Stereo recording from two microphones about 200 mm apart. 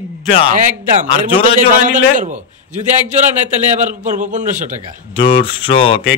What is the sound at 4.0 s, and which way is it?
Speech, 40° right (ahead or behind).